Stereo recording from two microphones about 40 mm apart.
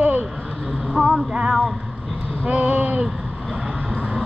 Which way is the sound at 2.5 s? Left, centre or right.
Right.